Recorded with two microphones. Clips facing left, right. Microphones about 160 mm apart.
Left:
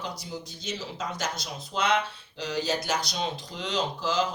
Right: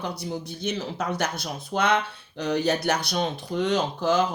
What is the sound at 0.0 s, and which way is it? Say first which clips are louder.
Speech: right 5 dB; 60° right (ahead or behind).